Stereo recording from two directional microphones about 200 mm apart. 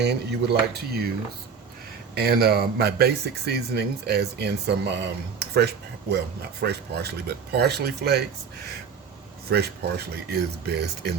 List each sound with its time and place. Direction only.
0.0 s speech: 55° right (ahead or behind)
2.1 s speech: 50° right (ahead or behind)
10.2 s speech: 55° right (ahead or behind)